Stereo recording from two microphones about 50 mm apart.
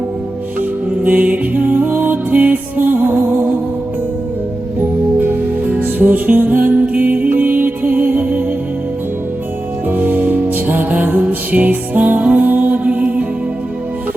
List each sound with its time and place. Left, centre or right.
1.0 s music: right
5.2 s music: right
10.0 s music: right